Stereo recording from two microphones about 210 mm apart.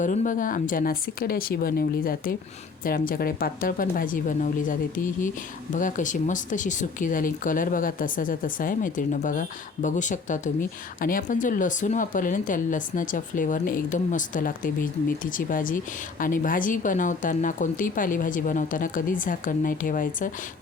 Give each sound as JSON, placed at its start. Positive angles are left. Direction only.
{"t": 0.0, "sound": "speech", "side_deg": 40}